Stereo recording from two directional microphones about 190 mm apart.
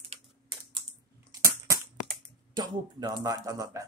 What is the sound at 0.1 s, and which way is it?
Typing, 25° right (ahead or behind).